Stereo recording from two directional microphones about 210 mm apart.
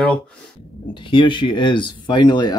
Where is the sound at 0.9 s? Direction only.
25° left (ahead or behind).